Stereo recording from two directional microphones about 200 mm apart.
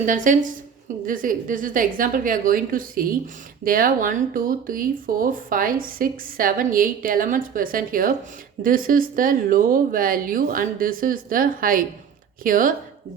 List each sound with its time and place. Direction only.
0.0 s a woman's voice: 40° right (ahead or behind)